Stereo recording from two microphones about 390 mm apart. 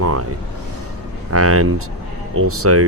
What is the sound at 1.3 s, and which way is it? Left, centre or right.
A man's voice, right.